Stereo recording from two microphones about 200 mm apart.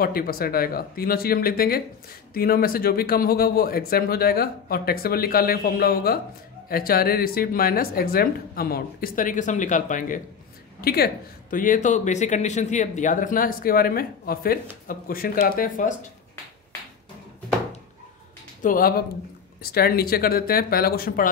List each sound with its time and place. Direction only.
0.0 s speech: 50° left (ahead or behind)
18.6 s speech: 45° left (ahead or behind)